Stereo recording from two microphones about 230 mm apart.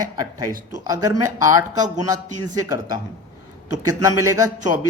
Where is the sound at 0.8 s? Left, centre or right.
Centre.